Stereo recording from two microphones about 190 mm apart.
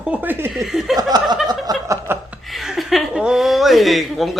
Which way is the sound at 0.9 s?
20° right (ahead or behind).